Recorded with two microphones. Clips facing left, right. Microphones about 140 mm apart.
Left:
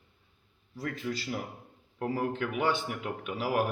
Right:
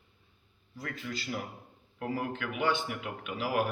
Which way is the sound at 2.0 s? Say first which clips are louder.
Left 3 dB; 35° left (ahead or behind).